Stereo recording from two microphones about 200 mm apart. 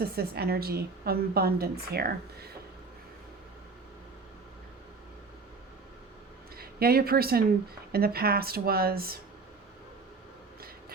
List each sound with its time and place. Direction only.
0.0 s a woman's voice: 50° right (ahead or behind)
6.6 s a woman's voice: 50° right (ahead or behind)